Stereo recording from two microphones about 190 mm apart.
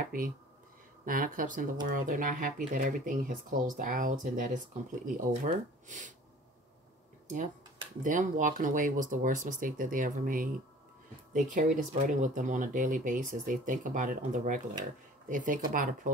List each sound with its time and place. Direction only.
0.0 s speech: 45° right (ahead or behind)
8.0 s speech: 40° right (ahead or behind)